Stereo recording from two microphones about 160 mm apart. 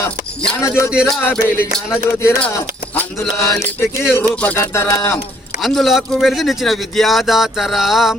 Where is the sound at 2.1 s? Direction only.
15° left (ahead or behind).